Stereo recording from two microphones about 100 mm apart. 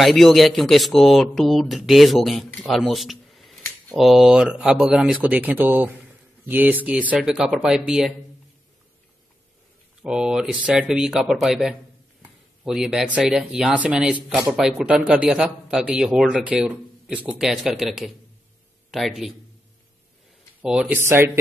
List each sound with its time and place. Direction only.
0.0 s speech: centre (ahead or behind)
2.7 s a sound: centre (ahead or behind)
3.9 s speech: 5° right (ahead or behind)
5.2 s speech: 15° right (ahead or behind)
10.0 s a man's voice: 10° right (ahead or behind)
20.9 s speech: 25° right (ahead or behind)